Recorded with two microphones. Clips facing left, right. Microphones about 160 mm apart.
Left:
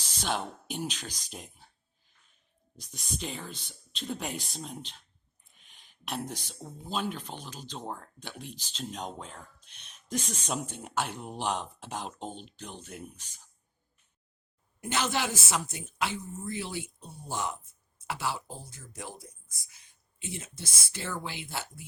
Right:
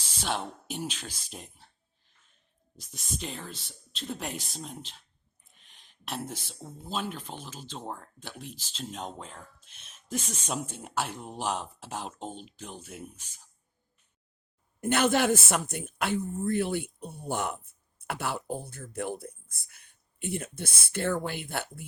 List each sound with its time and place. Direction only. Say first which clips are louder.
0.2 s speech: even; centre (ahead or behind)
14.8 s speech: right 6 dB; 55° right (ahead or behind)